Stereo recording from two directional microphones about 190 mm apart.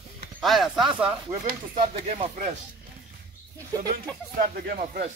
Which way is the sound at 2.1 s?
40° right (ahead or behind).